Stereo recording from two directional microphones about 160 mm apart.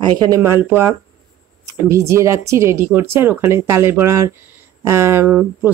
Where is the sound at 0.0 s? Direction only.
30° right (ahead or behind).